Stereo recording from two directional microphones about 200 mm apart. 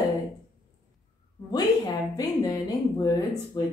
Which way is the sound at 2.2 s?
20° left (ahead or behind).